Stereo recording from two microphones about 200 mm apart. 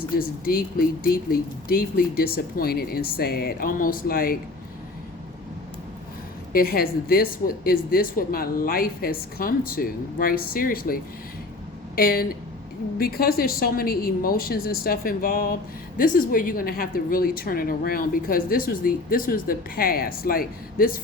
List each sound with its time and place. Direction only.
0.2 s a woman's voice: 45° left (ahead or behind)
6.5 s a woman's voice: 50° left (ahead or behind)